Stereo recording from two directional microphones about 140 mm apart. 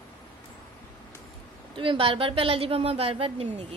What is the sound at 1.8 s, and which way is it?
A woman's voice, 40° right (ahead or behind).